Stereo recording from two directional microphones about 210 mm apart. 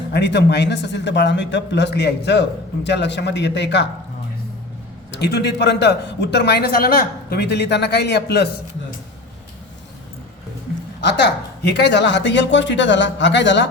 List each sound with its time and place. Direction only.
0.1 s speech: 55° left (ahead or behind)
5.1 s speech: 55° left (ahead or behind)
11.8 s speech: 55° left (ahead or behind)